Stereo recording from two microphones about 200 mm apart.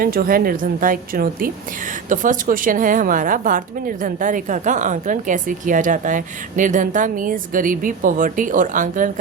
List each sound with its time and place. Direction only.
0.0 s a woman's voice: 45° right (ahead or behind)